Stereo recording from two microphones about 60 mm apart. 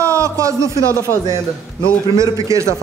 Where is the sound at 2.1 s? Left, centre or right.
Right.